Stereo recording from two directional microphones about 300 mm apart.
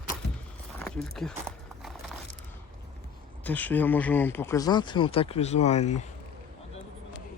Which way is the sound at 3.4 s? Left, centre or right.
Centre.